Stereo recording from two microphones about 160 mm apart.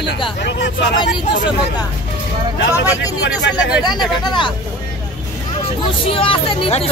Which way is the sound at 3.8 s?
25° left (ahead or behind).